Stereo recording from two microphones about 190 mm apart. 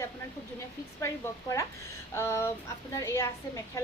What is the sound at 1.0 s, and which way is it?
A woman's voice, 15° left (ahead or behind).